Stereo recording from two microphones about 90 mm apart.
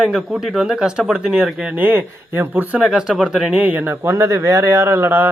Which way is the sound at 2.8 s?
5° right (ahead or behind).